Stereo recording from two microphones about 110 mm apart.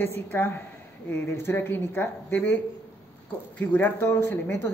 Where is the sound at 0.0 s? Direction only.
20° left (ahead or behind).